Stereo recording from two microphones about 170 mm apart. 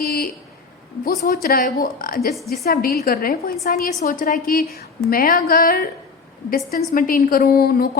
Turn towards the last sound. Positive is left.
turn(degrees=60)  # may be behind; listen again after turning